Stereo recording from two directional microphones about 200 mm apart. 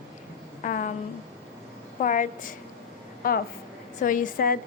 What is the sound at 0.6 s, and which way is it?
Speech, 40° left (ahead or behind).